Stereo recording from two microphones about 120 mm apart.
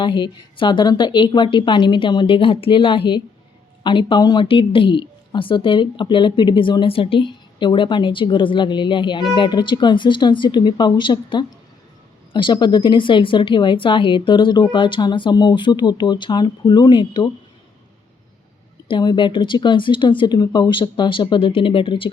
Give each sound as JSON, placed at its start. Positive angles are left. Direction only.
{"t": 0.0, "sound": "speech", "side_deg": 40}
{"t": 18.9, "sound": "speech", "side_deg": 40}